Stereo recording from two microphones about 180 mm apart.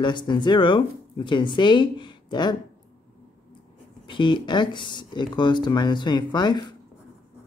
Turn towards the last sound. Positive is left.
turn(degrees=25)  # may be behind; listen again after turning